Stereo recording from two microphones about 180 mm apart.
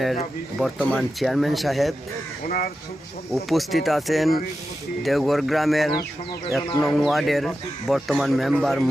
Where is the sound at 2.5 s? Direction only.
55° left (ahead or behind).